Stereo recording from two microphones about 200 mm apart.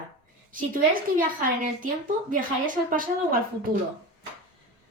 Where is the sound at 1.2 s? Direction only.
40° right (ahead or behind).